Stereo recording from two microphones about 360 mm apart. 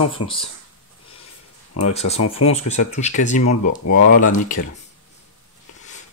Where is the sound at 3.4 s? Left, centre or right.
Left.